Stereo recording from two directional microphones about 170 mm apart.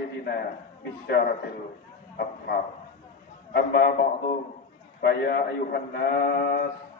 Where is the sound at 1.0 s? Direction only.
75° left (ahead or behind).